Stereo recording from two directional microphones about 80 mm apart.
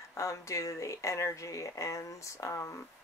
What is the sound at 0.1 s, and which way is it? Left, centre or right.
Speech, left.